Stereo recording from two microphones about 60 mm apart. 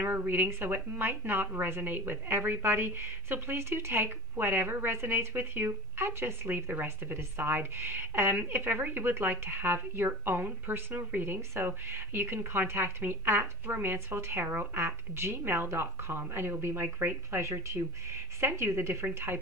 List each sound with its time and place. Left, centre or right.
0.0 s a woman's voice: right